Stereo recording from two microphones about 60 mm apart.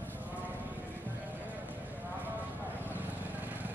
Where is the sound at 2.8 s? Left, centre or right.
Right.